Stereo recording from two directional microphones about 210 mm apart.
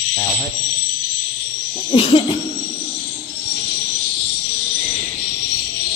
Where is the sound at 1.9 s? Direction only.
25° left (ahead or behind).